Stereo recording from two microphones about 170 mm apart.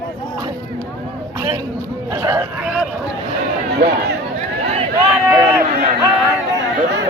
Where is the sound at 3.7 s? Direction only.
70° right (ahead or behind).